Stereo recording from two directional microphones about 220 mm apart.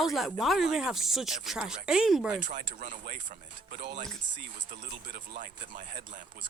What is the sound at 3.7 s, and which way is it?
Speech, 45° right (ahead or behind).